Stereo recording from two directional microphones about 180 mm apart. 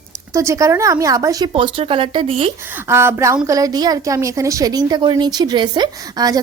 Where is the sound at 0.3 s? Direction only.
15° right (ahead or behind).